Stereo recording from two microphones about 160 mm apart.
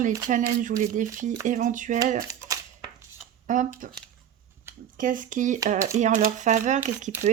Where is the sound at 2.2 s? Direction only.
20° right (ahead or behind).